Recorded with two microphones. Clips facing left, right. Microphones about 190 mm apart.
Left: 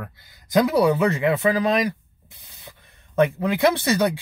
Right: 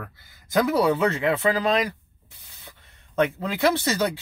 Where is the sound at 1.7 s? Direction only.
15° left (ahead or behind).